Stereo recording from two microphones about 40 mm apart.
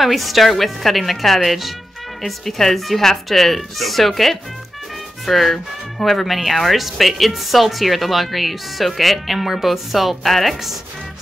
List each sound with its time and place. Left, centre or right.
0.0 s speech: centre